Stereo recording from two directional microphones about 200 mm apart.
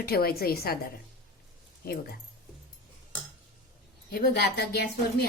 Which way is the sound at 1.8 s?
50° left (ahead or behind).